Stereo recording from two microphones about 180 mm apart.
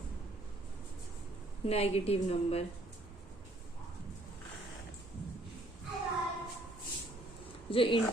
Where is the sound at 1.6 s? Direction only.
35° left (ahead or behind).